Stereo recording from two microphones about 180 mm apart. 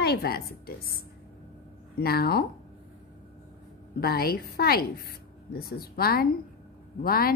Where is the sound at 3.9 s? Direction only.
60° left (ahead or behind).